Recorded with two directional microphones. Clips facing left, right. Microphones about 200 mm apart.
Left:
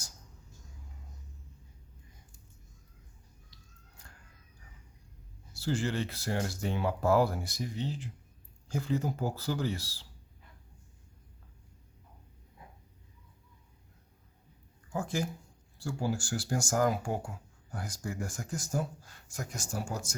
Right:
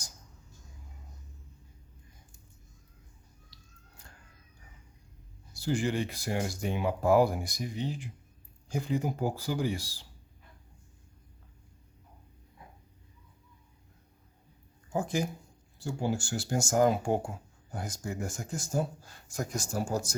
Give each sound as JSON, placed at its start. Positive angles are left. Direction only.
{"t": 3.5, "sound": "biting", "side_deg": -35}
{"t": 5.5, "sound": "speech", "side_deg": -15}
{"t": 14.8, "sound": "a sound", "side_deg": -20}
{"t": 15.8, "sound": "speech", "side_deg": -20}